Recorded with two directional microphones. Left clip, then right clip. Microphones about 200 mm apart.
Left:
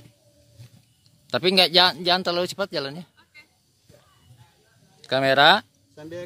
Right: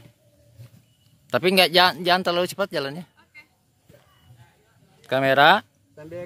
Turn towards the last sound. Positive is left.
turn(degrees=55)  # may be behind; listen again after turning